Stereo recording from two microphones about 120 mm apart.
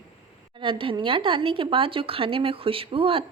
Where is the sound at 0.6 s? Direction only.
45° right (ahead or behind).